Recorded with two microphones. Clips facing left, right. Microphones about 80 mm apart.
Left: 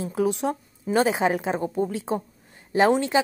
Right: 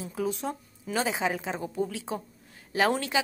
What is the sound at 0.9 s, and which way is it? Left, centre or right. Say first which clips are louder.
Speech: left 7 dB; left.